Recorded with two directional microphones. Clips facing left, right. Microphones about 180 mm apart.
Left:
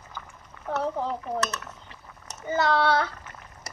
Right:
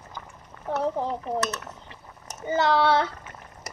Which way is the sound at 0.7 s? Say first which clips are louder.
Right 2 dB; 20° right (ahead or behind).